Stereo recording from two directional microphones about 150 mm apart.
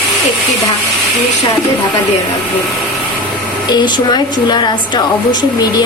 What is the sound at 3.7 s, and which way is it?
Speech, 30° left (ahead or behind).